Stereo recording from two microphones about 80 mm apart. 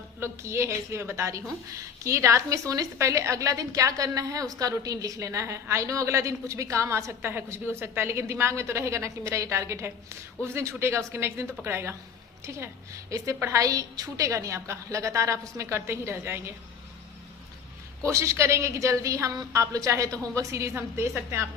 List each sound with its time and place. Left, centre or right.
0.2 s a woman's voice: right
18.0 s a woman's voice: right